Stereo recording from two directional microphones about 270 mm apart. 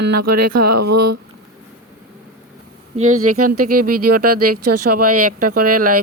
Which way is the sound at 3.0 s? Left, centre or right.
Right.